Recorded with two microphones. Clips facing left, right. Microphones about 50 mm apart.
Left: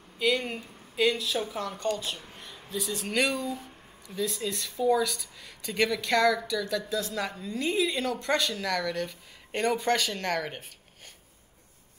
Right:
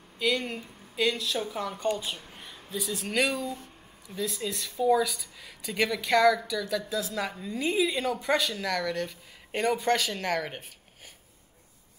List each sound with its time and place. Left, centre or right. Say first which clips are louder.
0.2 s speech: left 1 dB; centre
1.9 s speech: right 1 dB; centre
2.1 s speech: even; centre